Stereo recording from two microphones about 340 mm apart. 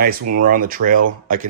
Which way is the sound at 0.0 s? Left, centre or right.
Right.